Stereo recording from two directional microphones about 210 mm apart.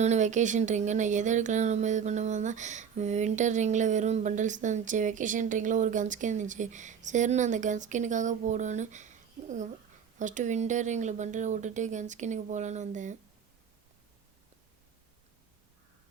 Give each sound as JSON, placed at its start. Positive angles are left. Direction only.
{"t": 0.0, "sound": "speech", "side_deg": -35}